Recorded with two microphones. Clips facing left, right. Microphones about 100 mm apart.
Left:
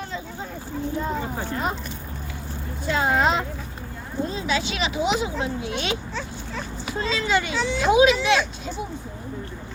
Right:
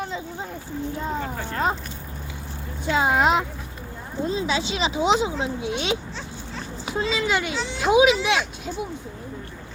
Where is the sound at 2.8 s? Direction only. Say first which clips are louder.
Right 1 dB; 15° right (ahead or behind).